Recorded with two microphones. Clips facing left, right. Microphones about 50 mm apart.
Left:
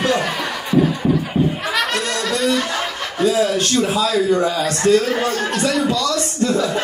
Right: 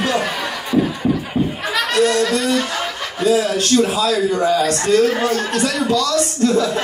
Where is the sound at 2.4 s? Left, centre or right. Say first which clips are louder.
Even; centre.